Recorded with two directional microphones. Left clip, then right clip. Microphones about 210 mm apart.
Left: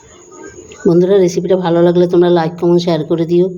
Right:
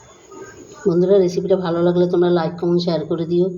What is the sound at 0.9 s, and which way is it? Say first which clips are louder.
Speech: left 5 dB; 35° left (ahead or behind).